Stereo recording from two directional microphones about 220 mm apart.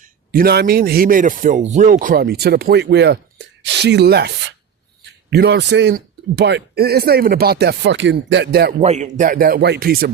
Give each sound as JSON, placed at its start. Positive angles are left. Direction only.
{"t": 0.0, "sound": "a man's voice", "side_deg": -40}
{"t": 8.8, "sound": "speech", "side_deg": -30}